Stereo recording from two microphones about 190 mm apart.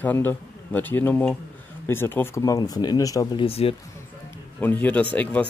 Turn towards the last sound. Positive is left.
turn(degrees=5)  # may be behind; listen again after turning